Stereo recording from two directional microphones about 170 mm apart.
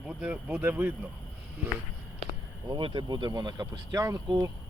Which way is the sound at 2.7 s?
25° right (ahead or behind).